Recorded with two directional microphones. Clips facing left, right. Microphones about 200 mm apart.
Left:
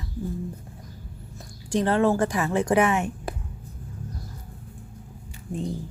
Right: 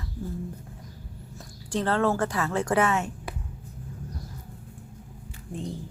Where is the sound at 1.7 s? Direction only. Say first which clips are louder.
Left 3 dB; 15° left (ahead or behind).